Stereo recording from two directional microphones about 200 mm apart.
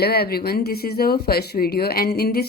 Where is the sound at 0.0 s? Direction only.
50° left (ahead or behind).